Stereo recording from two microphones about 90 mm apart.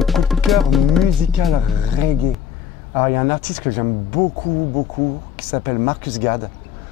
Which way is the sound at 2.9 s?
20° left (ahead or behind).